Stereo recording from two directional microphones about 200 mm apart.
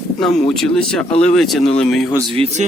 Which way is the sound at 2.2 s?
25° right (ahead or behind).